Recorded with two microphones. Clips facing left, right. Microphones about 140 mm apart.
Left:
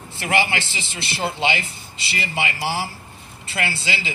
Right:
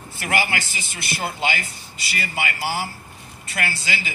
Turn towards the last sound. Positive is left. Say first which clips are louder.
# left 1 dB
turn(degrees=25)  # may be behind; listen again after turning